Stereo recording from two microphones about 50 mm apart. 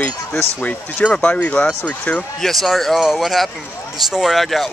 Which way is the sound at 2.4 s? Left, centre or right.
Centre.